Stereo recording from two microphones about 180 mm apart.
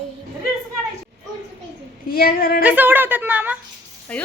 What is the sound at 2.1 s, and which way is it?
Speech, 55° left (ahead or behind).